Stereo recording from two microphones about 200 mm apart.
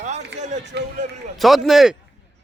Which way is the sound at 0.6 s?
60° right (ahead or behind).